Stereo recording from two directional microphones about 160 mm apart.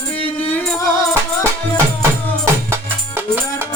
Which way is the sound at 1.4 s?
15° right (ahead or behind).